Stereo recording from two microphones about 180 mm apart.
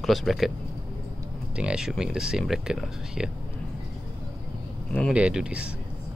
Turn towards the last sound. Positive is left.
turn(degrees=-5)  # may be behind; listen again after turning